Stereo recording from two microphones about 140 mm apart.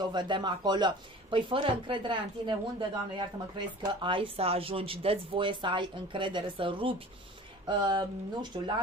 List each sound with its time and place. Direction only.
0.0 s speech: 30° right (ahead or behind)